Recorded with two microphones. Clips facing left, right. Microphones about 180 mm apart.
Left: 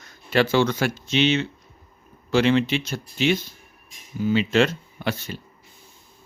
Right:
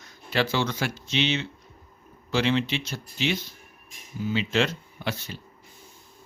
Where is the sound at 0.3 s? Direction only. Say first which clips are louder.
Left 6 dB; 55° left (ahead or behind).